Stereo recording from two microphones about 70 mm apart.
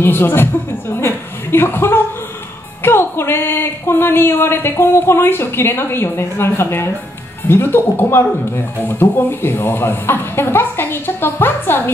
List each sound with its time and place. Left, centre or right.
0.0 s a man's voice: left
0.9 s a sound: left
2.8 s a man's voice: left